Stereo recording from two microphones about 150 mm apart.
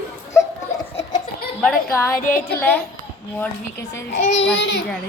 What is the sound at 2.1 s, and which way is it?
Speech, 70° left (ahead or behind).